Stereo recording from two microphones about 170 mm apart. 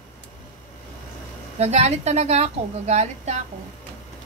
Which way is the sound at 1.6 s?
40° right (ahead or behind).